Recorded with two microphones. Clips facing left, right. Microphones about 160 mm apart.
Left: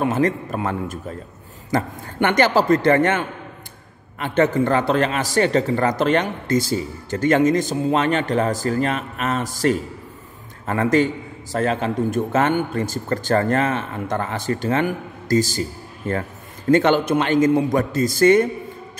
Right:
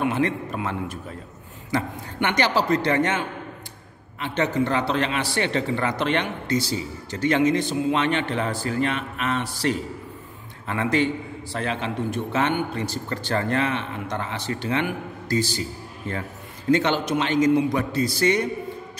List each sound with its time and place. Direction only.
0.0 s a man's voice: 40° left (ahead or behind)